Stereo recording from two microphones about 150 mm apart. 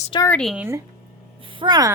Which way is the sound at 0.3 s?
5° left (ahead or behind).